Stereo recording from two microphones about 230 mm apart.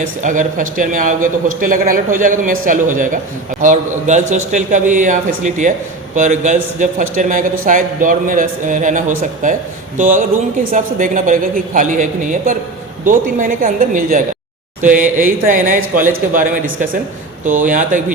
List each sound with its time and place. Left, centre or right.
0.0 s a man's voice: right
17.5 s a man's voice: right